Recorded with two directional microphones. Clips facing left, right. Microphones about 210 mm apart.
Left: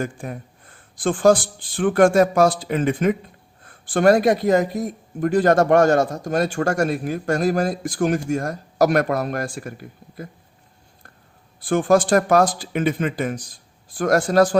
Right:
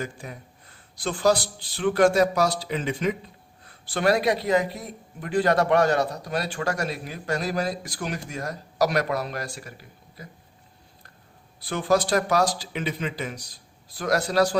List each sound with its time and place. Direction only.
0.0 s speech: 50° left (ahead or behind)
11.6 s speech: 50° left (ahead or behind)